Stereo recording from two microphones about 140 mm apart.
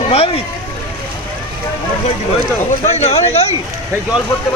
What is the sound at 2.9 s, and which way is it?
Speech, 50° left (ahead or behind).